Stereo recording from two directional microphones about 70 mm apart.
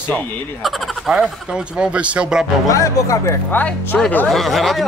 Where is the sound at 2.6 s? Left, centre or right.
Left.